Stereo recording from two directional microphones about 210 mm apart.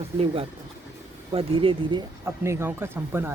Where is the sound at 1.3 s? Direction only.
25° right (ahead or behind).